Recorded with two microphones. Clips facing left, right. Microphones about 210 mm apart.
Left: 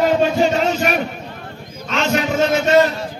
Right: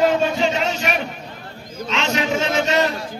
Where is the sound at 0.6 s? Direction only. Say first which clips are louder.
Left 4 dB; 45° left (ahead or behind).